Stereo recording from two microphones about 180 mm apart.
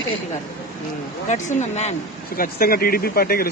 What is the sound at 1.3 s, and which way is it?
Speech, 40° left (ahead or behind).